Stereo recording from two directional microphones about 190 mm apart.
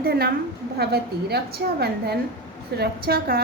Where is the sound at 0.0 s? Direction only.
55° right (ahead or behind).